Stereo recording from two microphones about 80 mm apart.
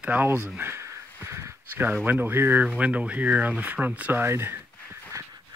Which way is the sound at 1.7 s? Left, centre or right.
Right.